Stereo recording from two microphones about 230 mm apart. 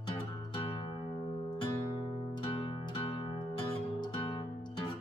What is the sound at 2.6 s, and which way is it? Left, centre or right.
Music, left.